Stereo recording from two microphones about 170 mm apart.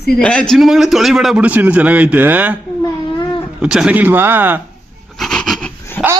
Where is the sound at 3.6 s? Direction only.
5° right (ahead or behind).